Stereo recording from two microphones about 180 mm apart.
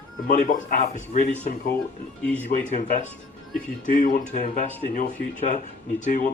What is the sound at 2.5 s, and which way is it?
Speech, 45° left (ahead or behind).